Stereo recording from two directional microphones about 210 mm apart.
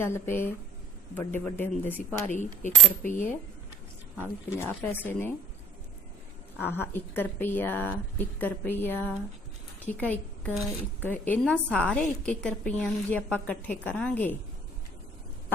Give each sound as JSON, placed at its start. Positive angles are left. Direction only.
{"t": 0.0, "sound": "a woman's voice", "side_deg": 10}
{"t": 2.3, "sound": "coin", "side_deg": 35}
{"t": 4.2, "sound": "a woman's voice", "side_deg": 10}
{"t": 6.6, "sound": "a woman's voice", "side_deg": 10}